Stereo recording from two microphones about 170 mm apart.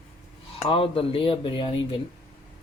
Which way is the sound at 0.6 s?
35° left (ahead or behind).